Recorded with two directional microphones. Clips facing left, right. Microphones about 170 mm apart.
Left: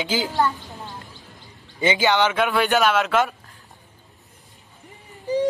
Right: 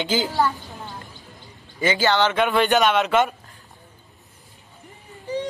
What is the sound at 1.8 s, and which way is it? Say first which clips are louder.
Speech: even; 20° left (ahead or behind).